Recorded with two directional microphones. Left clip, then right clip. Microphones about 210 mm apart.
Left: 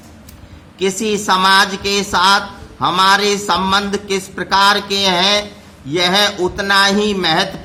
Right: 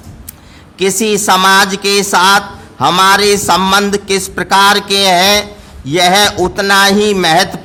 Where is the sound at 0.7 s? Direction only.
45° right (ahead or behind).